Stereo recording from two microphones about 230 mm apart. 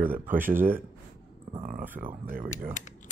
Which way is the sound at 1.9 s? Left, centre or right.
Centre.